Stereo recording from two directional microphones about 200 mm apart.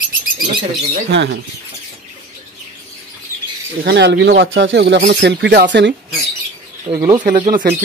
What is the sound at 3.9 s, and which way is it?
Speech, 60° right (ahead or behind).